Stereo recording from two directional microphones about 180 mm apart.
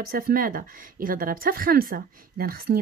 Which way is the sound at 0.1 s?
55° right (ahead or behind).